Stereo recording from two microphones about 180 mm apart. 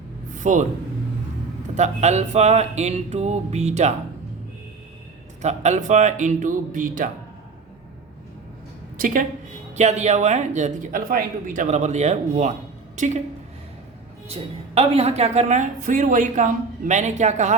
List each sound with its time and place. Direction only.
0.3 s a sound: 45° right (ahead or behind)
1.7 s a woman's voice: 40° right (ahead or behind)
5.4 s speech: 40° right (ahead or behind)
9.0 s a woman's voice: 50° right (ahead or behind)
14.8 s a woman's voice: 35° right (ahead or behind)